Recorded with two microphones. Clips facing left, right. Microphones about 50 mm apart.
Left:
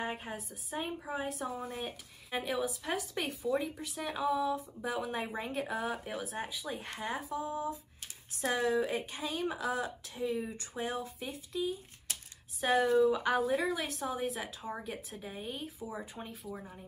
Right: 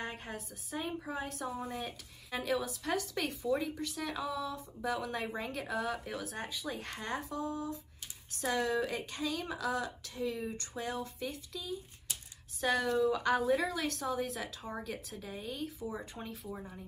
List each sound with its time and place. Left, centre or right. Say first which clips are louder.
0.0 s speech: left 3 dB; centre
10.4 s speech: right 1 dB; centre
10.8 s speech: left 1 dB; left
12.7 s speech: left 5 dB; left; by 16.8 s centre